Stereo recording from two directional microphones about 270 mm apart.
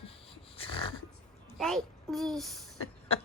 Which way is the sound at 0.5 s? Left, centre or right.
Centre.